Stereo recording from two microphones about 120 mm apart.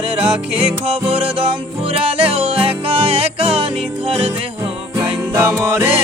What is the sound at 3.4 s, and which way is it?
Music, 50° right (ahead or behind).